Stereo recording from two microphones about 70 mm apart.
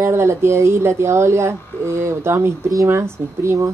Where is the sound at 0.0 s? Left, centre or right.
Right.